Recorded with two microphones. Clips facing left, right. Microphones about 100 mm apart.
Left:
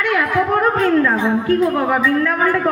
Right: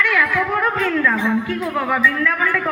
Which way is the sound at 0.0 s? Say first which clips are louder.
Left 2 dB; 40° left (ahead or behind).